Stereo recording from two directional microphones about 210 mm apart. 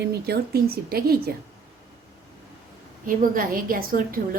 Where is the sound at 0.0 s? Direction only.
50° right (ahead or behind).